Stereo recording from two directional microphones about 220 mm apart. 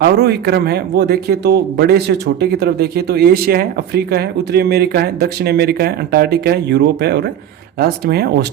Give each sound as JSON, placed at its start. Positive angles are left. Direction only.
{"t": 0.0, "sound": "speech", "side_deg": -45}